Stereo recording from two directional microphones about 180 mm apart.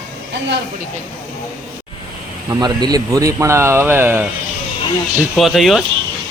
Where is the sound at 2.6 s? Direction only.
20° right (ahead or behind).